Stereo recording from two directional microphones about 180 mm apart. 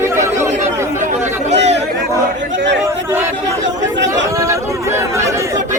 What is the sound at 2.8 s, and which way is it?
Chatter, 15° right (ahead or behind).